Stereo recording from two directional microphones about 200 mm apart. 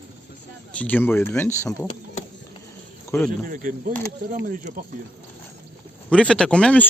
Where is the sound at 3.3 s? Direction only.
45° right (ahead or behind).